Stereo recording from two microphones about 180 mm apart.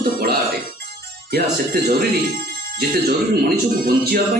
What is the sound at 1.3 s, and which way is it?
Speech, 60° right (ahead or behind).